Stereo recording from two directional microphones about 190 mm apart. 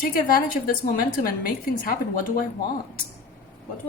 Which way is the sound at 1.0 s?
45° left (ahead or behind).